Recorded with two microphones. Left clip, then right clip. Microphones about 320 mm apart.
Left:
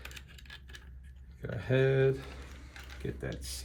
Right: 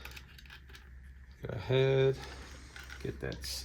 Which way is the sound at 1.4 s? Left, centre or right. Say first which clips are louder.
Left 1 dB; centre.